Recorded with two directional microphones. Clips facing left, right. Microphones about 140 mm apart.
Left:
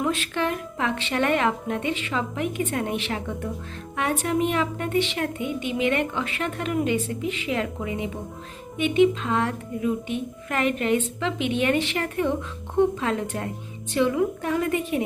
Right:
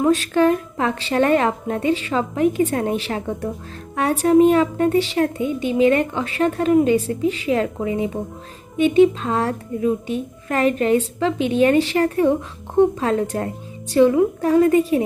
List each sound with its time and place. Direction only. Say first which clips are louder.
0.0 s a woman's voice: right 9 dB; 40° right (ahead or behind)